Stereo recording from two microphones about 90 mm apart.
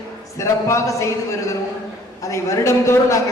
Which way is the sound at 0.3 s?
35° left (ahead or behind).